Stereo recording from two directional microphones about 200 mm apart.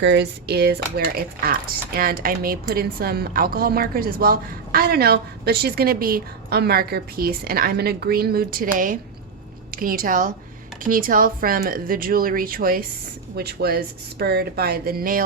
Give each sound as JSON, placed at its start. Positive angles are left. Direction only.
{"t": 0.0, "sound": "speech", "side_deg": -60}